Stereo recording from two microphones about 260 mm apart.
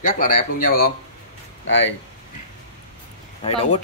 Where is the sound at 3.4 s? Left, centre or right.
Left.